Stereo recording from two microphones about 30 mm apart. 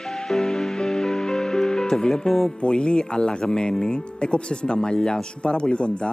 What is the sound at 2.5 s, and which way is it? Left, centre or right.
Speech, left.